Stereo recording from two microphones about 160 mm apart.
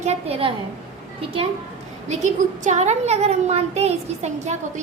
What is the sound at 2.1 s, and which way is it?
A child's voice, 45° right (ahead or behind).